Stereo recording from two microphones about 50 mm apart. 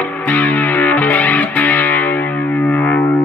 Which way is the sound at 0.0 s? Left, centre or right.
Left.